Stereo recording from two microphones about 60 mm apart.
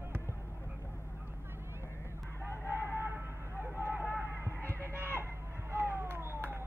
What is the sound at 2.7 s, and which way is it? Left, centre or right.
Music, right.